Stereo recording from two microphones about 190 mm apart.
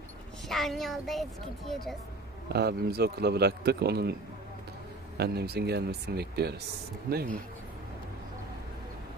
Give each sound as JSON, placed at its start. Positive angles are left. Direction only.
{"t": 0.5, "sound": "a child's voice", "side_deg": 0}
{"t": 2.5, "sound": "a man's voice", "side_deg": -60}